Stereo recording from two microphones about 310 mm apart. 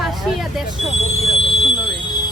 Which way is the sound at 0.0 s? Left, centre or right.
Centre.